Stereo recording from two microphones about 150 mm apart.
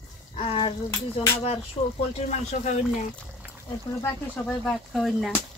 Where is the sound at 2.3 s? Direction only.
55° left (ahead or behind).